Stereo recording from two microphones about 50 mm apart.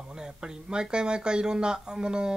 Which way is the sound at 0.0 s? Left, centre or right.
Centre.